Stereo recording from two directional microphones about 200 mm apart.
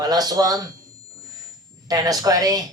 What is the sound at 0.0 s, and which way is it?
Speech, 20° right (ahead or behind).